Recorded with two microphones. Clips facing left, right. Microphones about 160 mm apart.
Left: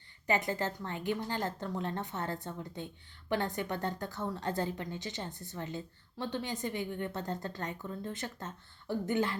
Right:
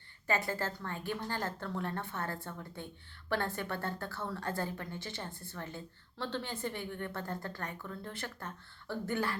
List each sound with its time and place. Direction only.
0.3 s a woman's voice: 20° left (ahead or behind)